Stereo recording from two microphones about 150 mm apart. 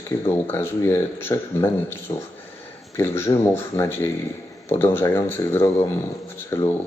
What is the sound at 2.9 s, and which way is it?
Speech, 15° left (ahead or behind).